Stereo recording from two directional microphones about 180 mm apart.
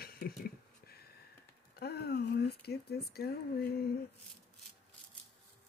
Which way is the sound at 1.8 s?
65° left (ahead or behind).